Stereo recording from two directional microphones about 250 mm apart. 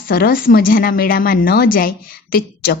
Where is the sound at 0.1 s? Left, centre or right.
Left.